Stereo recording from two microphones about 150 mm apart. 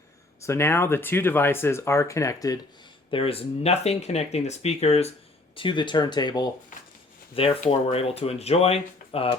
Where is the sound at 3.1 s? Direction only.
40° left (ahead or behind).